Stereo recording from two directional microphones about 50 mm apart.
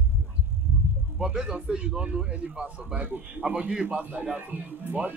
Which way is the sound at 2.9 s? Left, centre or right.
Right.